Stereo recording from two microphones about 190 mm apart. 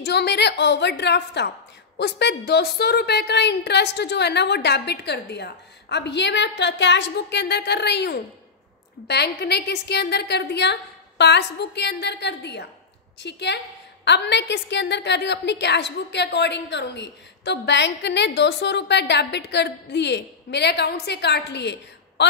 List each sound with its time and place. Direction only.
0.0 s a woman's voice: 60° left (ahead or behind)